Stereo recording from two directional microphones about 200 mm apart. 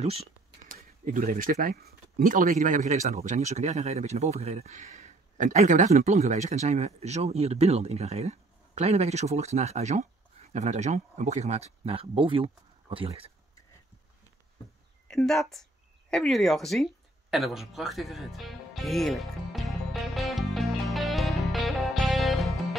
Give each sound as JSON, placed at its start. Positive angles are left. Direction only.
{"t": 0.0, "sound": "speech", "side_deg": -30}
{"t": 0.7, "sound": "speech", "side_deg": -45}
{"t": 15.0, "sound": "speech", "side_deg": 0}
{"t": 16.1, "sound": "a sound", "side_deg": 0}